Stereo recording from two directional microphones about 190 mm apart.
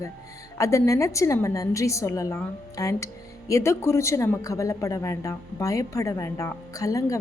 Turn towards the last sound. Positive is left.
turn(degrees=15)  # may be behind; listen again after turning